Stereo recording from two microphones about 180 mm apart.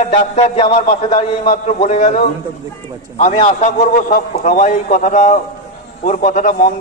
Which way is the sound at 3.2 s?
35° left (ahead or behind).